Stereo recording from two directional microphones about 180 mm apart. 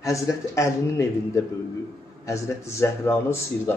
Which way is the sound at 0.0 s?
15° left (ahead or behind).